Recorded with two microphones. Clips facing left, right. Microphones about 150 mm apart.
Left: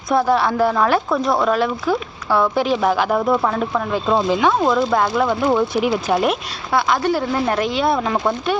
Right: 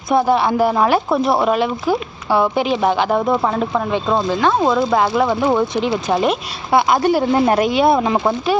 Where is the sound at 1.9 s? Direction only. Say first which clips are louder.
Right 2 dB; 5° right (ahead or behind).